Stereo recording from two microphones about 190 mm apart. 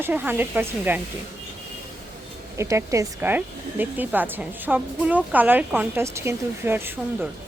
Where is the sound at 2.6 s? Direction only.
15° right (ahead or behind).